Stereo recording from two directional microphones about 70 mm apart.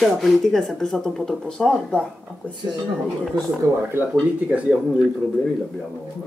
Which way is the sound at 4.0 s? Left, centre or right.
Right.